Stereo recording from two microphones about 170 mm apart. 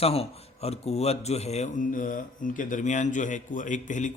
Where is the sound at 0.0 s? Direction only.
35° left (ahead or behind).